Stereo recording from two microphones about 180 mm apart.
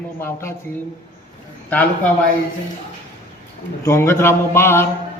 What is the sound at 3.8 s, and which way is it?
A man's voice, 15° left (ahead or behind).